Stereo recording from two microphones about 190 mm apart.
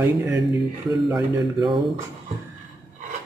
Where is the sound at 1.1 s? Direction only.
20° right (ahead or behind).